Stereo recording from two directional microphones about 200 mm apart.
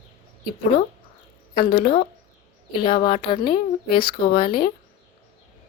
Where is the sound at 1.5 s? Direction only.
25° left (ahead or behind).